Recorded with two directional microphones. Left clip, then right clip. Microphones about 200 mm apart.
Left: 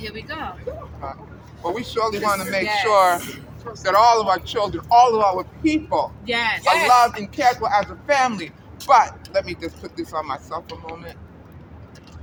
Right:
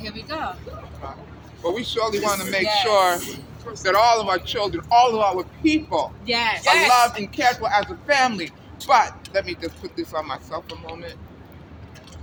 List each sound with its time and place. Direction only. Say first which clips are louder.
1.6 s speech: even; 50° left (ahead or behind)
3.2 s speech: even; 10° right (ahead or behind)
3.8 s speech: left 2 dB; 50° left (ahead or behind)
6.2 s speech: even; 15° left (ahead or behind)
6.7 s speech: left 1 dB; 45° left (ahead or behind)